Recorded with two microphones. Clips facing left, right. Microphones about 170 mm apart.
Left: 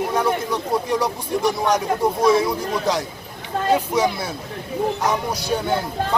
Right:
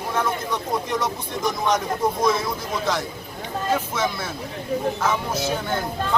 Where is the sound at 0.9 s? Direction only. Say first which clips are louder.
Left 4 dB; 35° left (ahead or behind).